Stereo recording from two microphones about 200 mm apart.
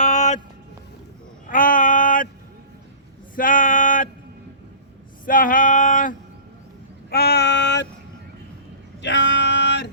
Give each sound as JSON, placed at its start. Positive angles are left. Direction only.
{"t": 0.0, "sound": "music", "side_deg": 35}
{"t": 1.5, "sound": "a sound", "side_deg": 45}
{"t": 3.3, "sound": "a sound", "side_deg": 45}
{"t": 5.2, "sound": "male singing", "side_deg": 45}
{"t": 7.1, "sound": "female singing", "side_deg": 55}
{"t": 9.0, "sound": "music", "side_deg": 60}